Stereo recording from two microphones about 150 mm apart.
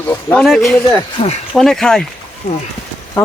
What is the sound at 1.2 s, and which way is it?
Speech, 35° left (ahead or behind).